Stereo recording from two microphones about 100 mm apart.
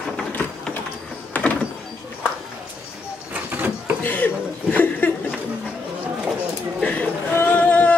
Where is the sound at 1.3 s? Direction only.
15° left (ahead or behind).